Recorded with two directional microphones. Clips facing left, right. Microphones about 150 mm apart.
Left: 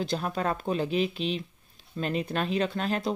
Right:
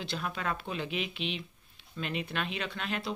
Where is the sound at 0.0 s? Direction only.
40° left (ahead or behind).